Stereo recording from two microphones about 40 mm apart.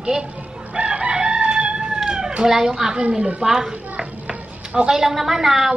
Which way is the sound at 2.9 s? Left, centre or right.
Right.